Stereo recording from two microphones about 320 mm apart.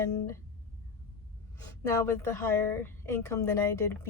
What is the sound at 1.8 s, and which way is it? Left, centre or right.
A woman's voice, centre.